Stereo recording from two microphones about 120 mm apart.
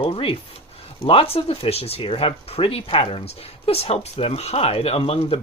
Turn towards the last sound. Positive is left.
turn(degrees=55)  # may be behind; listen again after turning